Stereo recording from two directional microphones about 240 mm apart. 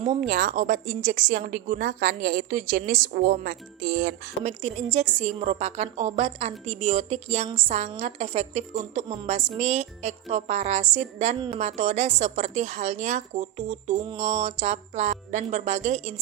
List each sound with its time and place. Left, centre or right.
0.2 s a woman's voice: right